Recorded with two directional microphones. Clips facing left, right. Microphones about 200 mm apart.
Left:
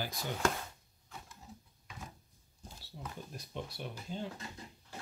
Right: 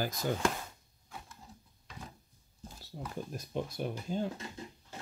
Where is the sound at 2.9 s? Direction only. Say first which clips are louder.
Right 4 dB; 45° right (ahead or behind).